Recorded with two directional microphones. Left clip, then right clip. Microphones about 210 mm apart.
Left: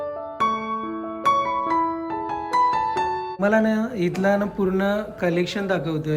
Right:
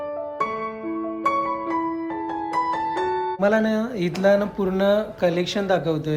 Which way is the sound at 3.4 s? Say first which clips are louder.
Left 1 dB; centre (ahead or behind).